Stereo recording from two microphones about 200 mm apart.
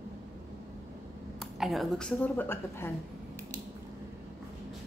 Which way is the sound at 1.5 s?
Centre (ahead or behind).